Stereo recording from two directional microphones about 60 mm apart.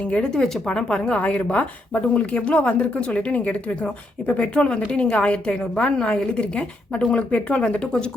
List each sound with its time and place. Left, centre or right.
0.0 s speech: left
0.3 s speech: centre
1.2 s speech: left